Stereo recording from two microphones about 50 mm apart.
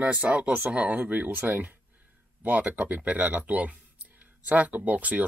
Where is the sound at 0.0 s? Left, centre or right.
Right.